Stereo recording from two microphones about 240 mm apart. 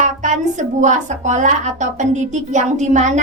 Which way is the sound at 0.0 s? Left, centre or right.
Right.